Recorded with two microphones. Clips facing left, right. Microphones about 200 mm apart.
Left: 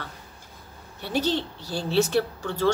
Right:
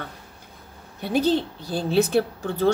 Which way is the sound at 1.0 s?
55° right (ahead or behind).